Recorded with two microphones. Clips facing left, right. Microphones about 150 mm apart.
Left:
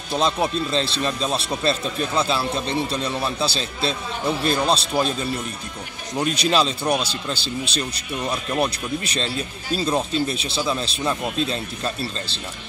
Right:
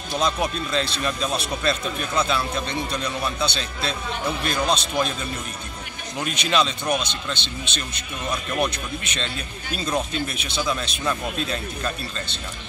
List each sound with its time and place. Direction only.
0.2 s a man's voice: 30° left (ahead or behind)
6.1 s a man's voice: 35° left (ahead or behind)